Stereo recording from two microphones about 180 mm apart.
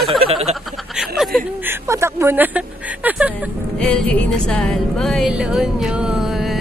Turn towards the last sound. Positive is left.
turn(degrees=0)  # may be behind; listen again after turning